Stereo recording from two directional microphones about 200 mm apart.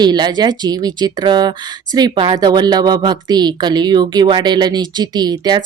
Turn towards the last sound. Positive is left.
turn(degrees=-20)  # may be behind; listen again after turning